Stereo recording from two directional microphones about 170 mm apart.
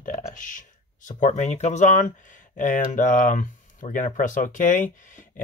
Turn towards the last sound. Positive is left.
turn(degrees=50)  # may be behind; listen again after turning